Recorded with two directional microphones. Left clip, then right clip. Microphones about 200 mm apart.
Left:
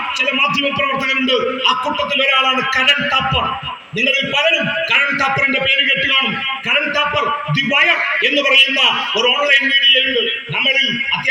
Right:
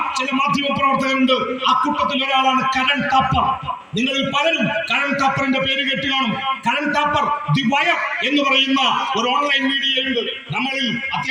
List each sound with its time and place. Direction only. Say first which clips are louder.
1.2 s a man's voice: left 2 dB; 30° left (ahead or behind)
7.7 s a man's voice: left 4 dB; 30° left (ahead or behind)